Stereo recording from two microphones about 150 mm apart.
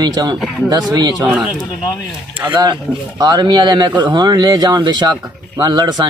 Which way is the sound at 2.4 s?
25° right (ahead or behind).